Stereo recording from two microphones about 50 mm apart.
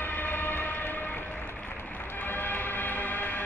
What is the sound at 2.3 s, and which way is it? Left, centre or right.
Train, left.